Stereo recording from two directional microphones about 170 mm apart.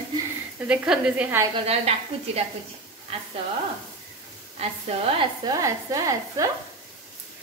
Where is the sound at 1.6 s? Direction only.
35° right (ahead or behind).